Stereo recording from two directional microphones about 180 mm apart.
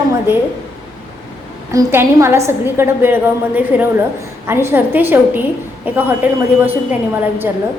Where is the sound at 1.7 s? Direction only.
15° right (ahead or behind).